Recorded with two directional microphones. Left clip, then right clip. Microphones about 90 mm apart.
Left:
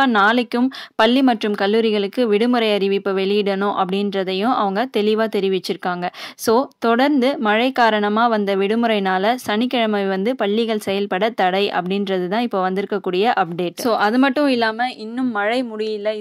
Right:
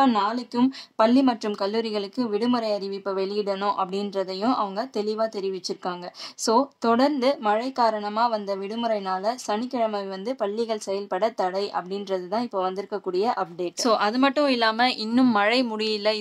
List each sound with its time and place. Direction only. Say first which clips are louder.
0.0 s speech: left 7 dB; 40° left (ahead or behind)
6.4 s a woman's voice: left 4 dB; 35° left (ahead or behind)
15.3 s speech: left 1 dB; 20° left (ahead or behind)